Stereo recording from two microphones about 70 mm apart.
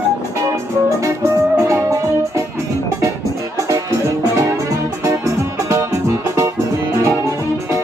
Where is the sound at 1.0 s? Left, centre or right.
Right.